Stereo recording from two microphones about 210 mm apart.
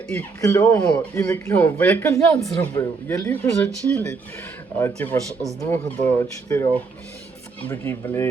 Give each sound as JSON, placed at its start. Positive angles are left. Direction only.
{"t": 0.1, "sound": "a man's voice", "side_deg": 15}
{"t": 5.3, "sound": "speech", "side_deg": -15}
{"t": 5.5, "sound": "a man's voice", "side_deg": 15}